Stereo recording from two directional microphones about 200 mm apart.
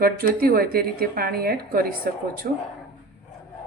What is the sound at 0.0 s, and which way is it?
A woman's voice, 50° right (ahead or behind).